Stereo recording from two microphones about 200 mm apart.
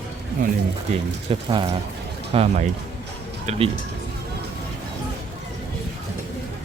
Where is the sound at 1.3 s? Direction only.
25° right (ahead or behind).